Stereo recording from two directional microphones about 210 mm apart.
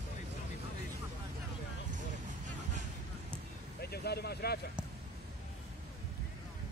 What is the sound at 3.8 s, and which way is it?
Vehicle, 50° left (ahead or behind).